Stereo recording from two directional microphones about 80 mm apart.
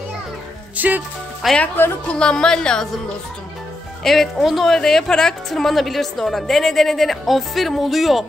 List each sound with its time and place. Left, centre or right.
0.7 s speech: right
1.4 s a woman's voice: centre
2.0 s a woman's voice: centre
4.0 s a woman's voice: centre